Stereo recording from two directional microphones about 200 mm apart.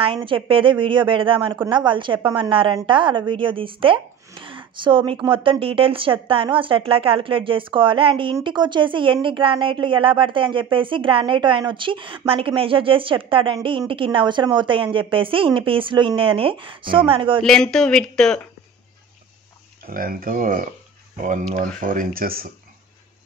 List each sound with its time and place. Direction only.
0.0 s a woman's voice: 25° right (ahead or behind)
17.4 s speech: 5° left (ahead or behind)
19.9 s speech: 45° right (ahead or behind)